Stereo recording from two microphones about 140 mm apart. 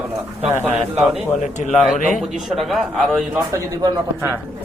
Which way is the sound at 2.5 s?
Centre (ahead or behind).